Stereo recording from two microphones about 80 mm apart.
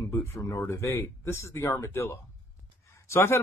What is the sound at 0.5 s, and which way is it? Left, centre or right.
Speech, left.